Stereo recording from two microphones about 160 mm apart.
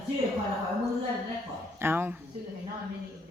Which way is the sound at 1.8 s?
15° right (ahead or behind).